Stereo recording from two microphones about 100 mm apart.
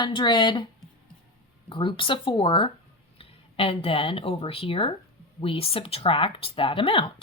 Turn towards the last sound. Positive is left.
turn(degrees=60)  # may be behind; listen again after turning